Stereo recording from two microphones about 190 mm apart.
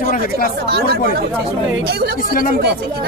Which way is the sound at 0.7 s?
60° right (ahead or behind).